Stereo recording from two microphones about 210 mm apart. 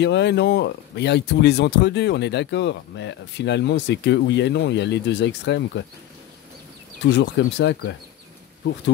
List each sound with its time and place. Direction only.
0.0 s speech: 55° left (ahead or behind)
7.0 s speech: 60° left (ahead or behind)